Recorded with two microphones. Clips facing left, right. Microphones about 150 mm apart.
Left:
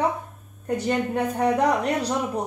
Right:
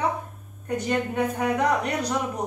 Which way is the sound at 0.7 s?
35° left (ahead or behind).